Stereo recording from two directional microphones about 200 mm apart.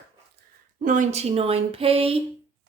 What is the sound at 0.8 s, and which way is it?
Speech, 40° right (ahead or behind).